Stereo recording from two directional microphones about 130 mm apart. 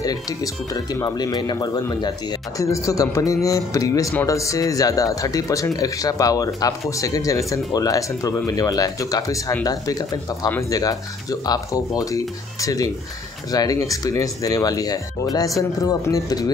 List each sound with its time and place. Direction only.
0.0 s speech: 30° left (ahead or behind)